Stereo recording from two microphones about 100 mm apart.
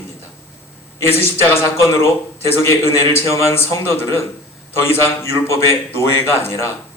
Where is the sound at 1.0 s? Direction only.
25° left (ahead or behind).